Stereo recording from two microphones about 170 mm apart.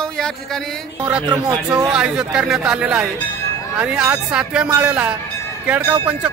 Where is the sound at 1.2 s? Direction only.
25° right (ahead or behind).